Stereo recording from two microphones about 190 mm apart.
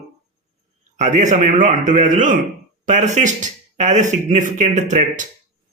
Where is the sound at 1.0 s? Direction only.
40° right (ahead or behind).